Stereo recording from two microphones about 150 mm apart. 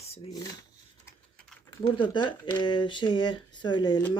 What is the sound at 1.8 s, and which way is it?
Speech, 30° left (ahead or behind).